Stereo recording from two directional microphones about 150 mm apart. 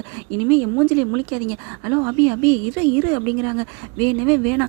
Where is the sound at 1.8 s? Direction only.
15° right (ahead or behind).